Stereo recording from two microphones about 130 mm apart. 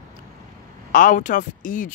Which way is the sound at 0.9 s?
90° left.